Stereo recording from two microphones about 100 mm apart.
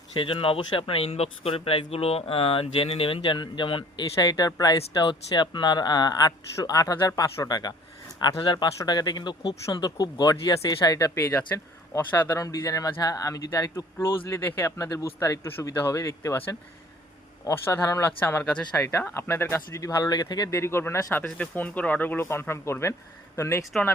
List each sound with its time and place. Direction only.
0.2 s speech: 65° left (ahead or behind)
0.6 s speech: 55° left (ahead or behind)
4.2 s speech: 40° left (ahead or behind)
17.4 s speech: 30° left (ahead or behind)
20.6 s speech: 25° left (ahead or behind)
21.2 s speech: 15° left (ahead or behind)